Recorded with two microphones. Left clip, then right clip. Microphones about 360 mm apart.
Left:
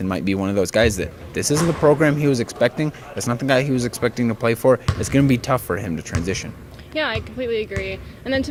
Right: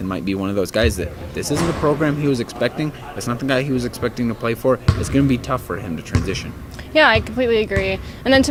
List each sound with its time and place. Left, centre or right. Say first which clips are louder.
0.1 s speech: even; left
6.9 s speech: right 10 dB; right